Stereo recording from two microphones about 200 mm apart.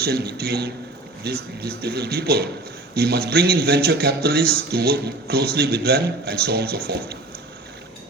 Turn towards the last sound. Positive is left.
turn(degrees=-55)  # may be behind; listen again after turning